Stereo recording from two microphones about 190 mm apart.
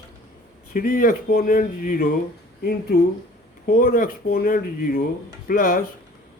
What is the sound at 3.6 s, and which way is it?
Speech, 50° left (ahead or behind).